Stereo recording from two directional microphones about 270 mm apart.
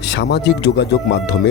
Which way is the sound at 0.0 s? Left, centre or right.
Left.